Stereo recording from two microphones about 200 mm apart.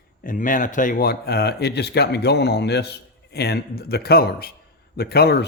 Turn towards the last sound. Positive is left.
turn(degrees=50)  # may be behind; listen again after turning